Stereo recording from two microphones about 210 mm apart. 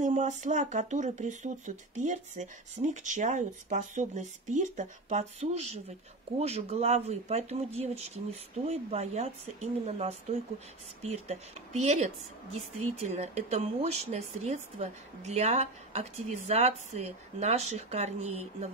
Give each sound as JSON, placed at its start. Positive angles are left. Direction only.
{"t": 0.0, "sound": "speech", "side_deg": -35}